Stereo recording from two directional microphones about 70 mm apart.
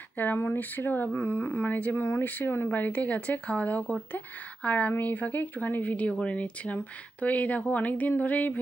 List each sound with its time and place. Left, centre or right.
0.3 s speech: left
2.0 s speech: left
2.2 s speech: left